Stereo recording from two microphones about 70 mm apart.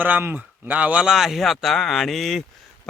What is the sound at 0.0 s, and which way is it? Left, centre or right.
Speech, right.